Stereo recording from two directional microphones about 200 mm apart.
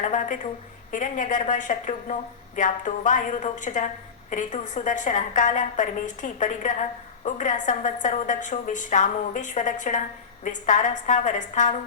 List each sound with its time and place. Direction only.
0.0 s a woman's voice: 40° left (ahead or behind)